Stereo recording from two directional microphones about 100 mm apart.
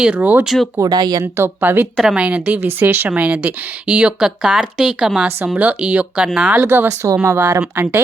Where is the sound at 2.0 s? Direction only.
5° right (ahead or behind).